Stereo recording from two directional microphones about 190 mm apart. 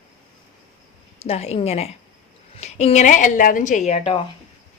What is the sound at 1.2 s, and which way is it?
A woman's voice, 35° left (ahead or behind).